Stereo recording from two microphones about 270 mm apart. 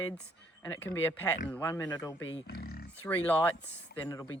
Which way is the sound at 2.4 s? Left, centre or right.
Left.